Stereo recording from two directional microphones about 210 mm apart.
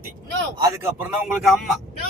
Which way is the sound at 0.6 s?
15° right (ahead or behind).